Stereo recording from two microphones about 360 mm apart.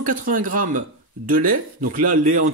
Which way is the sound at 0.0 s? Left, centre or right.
Right.